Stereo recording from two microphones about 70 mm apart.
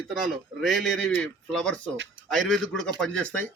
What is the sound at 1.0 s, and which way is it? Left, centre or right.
Speech, centre.